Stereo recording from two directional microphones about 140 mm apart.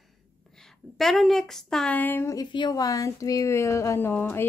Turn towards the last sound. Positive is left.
turn(degrees=15)  # may be behind; listen again after turning